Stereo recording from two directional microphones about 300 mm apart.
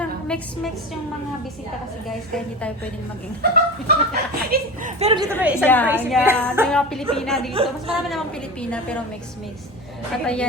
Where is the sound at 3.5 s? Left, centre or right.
Right.